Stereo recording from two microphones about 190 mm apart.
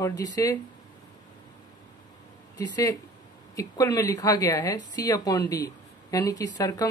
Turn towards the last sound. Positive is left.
turn(degrees=20)  # may be behind; listen again after turning